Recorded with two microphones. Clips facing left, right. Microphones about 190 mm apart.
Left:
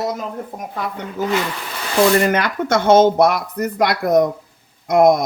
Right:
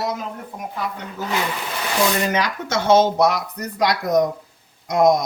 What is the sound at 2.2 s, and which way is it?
Speech, 55° left (ahead or behind).